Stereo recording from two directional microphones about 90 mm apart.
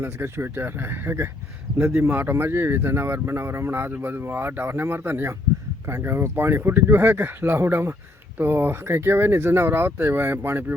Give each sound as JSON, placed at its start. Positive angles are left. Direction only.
{"t": 0.0, "sound": "speech", "side_deg": -25}